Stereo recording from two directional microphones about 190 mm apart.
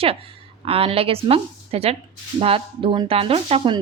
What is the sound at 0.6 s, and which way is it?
A woman's voice, 30° right (ahead or behind).